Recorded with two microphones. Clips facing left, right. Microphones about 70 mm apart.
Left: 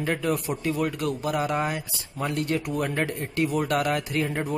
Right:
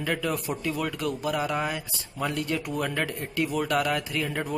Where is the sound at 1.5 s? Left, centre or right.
Left.